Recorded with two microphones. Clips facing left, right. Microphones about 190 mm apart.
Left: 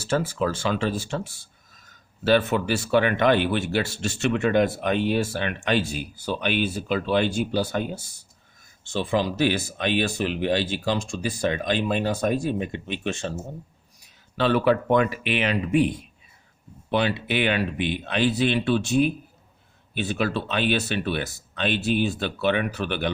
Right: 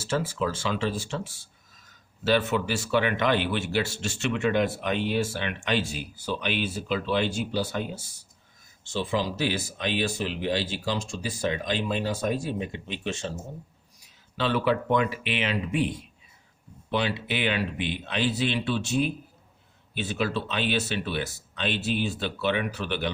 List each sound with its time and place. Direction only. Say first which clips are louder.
0.1 s speech: left 3 dB; 55° left (ahead or behind)
2.2 s speech: left 3 dB; 50° left (ahead or behind)
14.3 s speech: left 4 dB; 55° left (ahead or behind)
16.9 s speech: left 4 dB; 55° left (ahead or behind)